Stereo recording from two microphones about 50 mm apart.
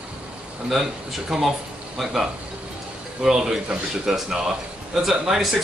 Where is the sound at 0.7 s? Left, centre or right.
Centre.